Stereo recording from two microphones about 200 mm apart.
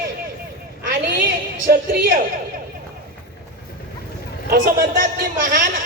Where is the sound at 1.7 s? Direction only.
45° right (ahead or behind).